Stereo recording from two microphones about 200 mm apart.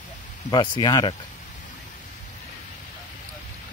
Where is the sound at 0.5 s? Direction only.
20° left (ahead or behind).